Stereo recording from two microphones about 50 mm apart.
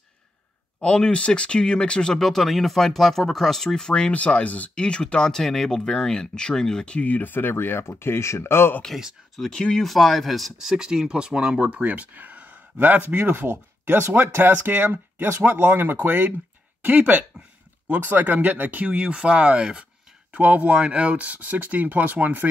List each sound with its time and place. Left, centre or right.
0.7 s speech: centre
2.1 s speech: centre; by 7.2 s left
7.2 s speech: left
9.4 s speech: centre
10.6 s speech: centre; by 18.9 s right
18.9 s speech: right